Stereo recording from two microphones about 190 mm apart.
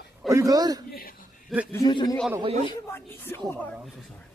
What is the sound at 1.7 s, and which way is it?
A man's voice, 20° left (ahead or behind).